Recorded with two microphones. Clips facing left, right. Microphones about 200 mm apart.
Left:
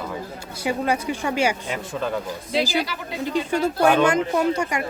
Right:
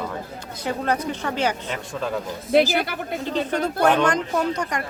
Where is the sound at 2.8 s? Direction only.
55° right (ahead or behind).